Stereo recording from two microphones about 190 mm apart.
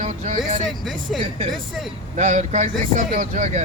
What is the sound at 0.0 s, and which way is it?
Speech, 40° right (ahead or behind).